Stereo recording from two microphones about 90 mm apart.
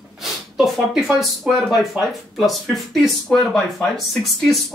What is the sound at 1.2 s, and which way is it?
Speech, 5° right (ahead or behind).